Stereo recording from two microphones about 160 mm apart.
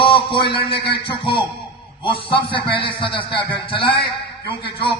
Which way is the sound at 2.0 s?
35° left (ahead or behind).